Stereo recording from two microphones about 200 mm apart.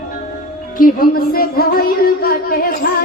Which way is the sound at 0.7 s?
45° left (ahead or behind).